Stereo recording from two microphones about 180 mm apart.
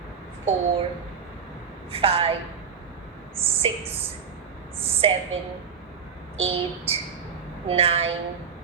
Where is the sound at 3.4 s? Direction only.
35° right (ahead or behind).